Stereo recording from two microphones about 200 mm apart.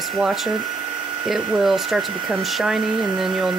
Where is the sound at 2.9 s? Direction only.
20° right (ahead or behind).